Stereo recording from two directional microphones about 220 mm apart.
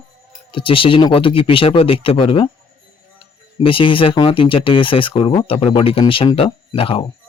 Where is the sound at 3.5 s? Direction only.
25° left (ahead or behind).